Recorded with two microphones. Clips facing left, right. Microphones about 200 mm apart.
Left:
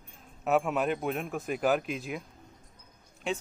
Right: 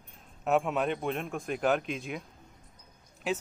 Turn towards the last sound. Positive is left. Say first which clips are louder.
# right 1 dB
turn(degrees=-5)  # may be behind; listen again after turning